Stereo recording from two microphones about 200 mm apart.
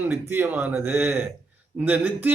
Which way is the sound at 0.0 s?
10° right (ahead or behind).